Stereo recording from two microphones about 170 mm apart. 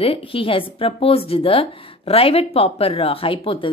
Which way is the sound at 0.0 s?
35° left (ahead or behind).